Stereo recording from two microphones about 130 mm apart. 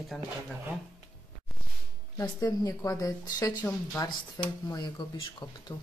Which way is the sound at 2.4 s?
25° left (ahead or behind).